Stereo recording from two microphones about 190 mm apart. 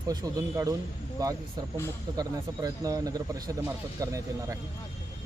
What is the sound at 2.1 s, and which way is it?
Speech, 20° right (ahead or behind).